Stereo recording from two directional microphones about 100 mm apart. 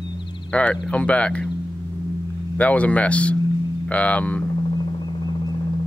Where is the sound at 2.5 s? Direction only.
15° left (ahead or behind).